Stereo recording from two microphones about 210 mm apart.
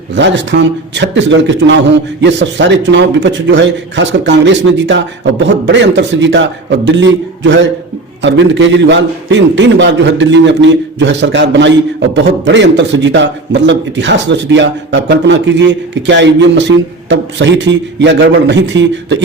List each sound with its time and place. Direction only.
0.1 s a man's voice: 60° right (ahead or behind)